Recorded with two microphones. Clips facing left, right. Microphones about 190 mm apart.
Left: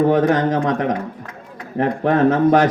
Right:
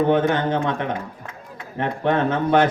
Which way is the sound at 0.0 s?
35° left (ahead or behind).